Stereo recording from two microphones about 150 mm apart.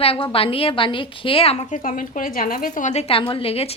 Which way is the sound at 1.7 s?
60° left (ahead or behind).